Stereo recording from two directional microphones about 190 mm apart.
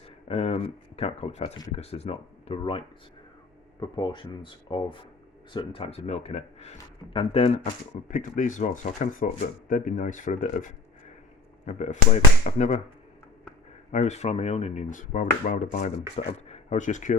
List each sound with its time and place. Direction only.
0.3 s speech: 30° left (ahead or behind)
1.5 s speech: 20° left (ahead or behind)
1.8 s speech: 30° left (ahead or behind)
13.9 s speech: 35° left (ahead or behind)